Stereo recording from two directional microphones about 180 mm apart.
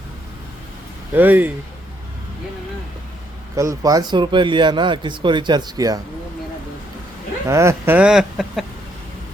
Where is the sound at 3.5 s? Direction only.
20° right (ahead or behind).